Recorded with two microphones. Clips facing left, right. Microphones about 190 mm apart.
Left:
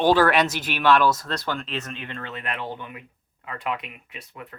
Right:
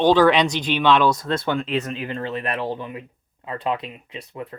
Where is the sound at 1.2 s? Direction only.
25° right (ahead or behind).